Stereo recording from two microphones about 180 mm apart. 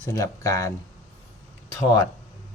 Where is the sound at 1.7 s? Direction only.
20° left (ahead or behind).